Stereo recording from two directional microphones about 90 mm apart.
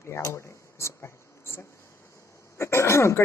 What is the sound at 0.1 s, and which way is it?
Speech, 35° left (ahead or behind).